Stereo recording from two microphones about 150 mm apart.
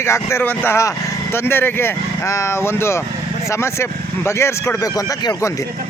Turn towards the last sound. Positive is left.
turn(degrees=25)  # may be behind; listen again after turning